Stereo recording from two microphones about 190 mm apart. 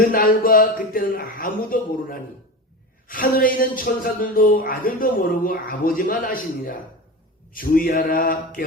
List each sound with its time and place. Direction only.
0.1 s speech: 50° left (ahead or behind)